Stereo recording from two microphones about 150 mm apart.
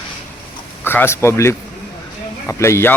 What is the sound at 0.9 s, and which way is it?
Speech, 15° left (ahead or behind).